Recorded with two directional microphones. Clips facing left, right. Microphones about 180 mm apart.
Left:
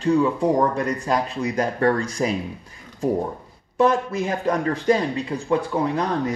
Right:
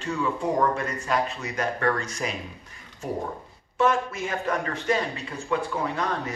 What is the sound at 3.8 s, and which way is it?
Speech, 35° left (ahead or behind).